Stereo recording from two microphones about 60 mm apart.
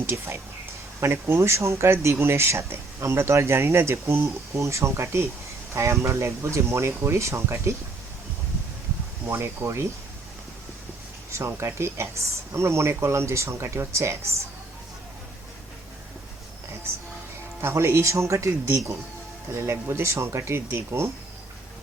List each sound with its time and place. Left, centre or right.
0.0 s speech: right
9.2 s speech: right
11.3 s speech: right
17.6 s speech: right